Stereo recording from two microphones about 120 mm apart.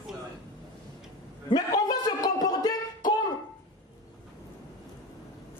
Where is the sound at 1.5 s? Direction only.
35° left (ahead or behind).